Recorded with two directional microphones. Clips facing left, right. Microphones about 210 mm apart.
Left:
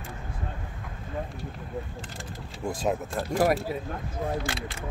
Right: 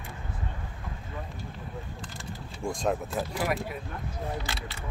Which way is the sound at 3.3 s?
45° left (ahead or behind).